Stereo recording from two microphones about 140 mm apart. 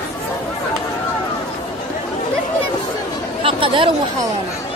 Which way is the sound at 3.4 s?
40° right (ahead or behind).